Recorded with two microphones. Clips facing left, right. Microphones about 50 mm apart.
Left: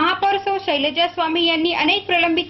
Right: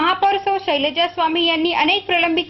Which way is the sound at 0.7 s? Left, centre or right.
Right.